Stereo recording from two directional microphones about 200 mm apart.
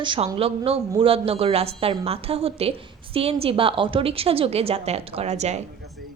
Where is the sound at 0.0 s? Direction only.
25° right (ahead or behind).